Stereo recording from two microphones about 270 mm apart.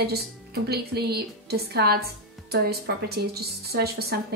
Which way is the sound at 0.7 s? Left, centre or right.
Right.